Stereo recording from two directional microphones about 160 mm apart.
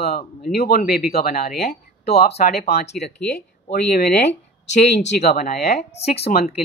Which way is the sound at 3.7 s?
85° left.